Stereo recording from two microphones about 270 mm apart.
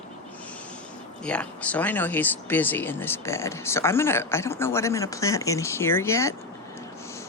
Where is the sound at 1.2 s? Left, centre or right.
Centre.